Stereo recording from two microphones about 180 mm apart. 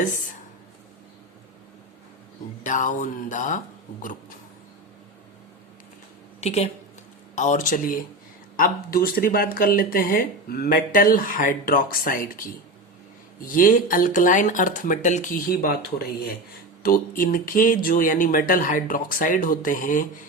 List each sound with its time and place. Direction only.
2.6 s speech: 45° left (ahead or behind)
6.4 s speech: 35° left (ahead or behind)